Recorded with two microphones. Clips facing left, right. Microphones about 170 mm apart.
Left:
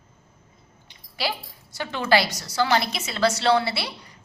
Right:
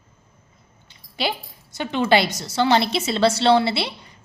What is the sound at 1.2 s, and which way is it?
A woman's voice, 20° right (ahead or behind).